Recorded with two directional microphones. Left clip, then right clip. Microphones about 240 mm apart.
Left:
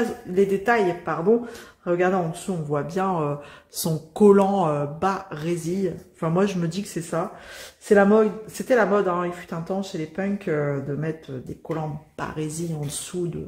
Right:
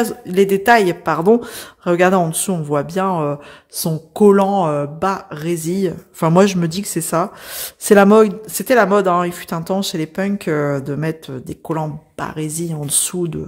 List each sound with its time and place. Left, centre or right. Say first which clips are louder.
0.3 s speech: right 9 dB; right